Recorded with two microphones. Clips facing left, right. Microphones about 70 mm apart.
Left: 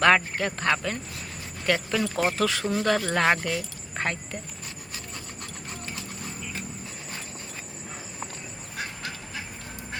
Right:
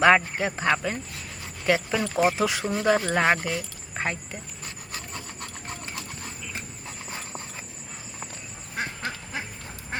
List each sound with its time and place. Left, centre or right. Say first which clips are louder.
0.0 s speech: right 2 dB; centre
8.8 s duck: right 4 dB; right